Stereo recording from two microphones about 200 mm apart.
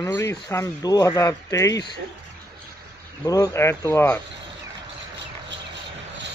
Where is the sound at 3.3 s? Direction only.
15° left (ahead or behind).